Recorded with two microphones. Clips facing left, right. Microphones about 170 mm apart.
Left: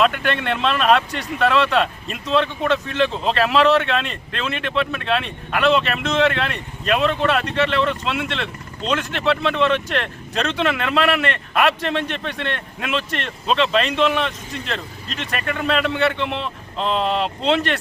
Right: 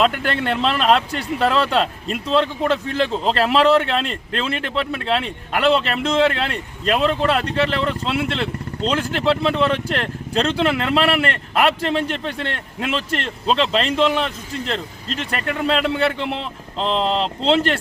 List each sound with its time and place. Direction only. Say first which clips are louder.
0.0 s speech: even; 30° right (ahead or behind)